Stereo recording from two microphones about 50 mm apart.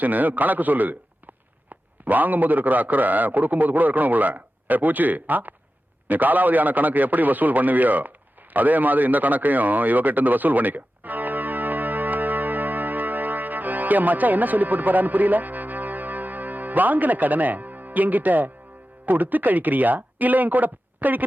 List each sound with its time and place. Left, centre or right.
0.0 s a man's voice: right
8.5 s a sound: right
19.0 s a man's voice: right